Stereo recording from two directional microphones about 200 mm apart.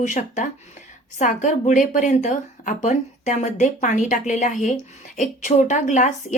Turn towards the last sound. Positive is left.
turn(degrees=40)  # may be behind; listen again after turning